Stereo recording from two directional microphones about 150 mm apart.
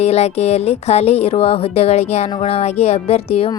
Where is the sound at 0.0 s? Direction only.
45° left (ahead or behind).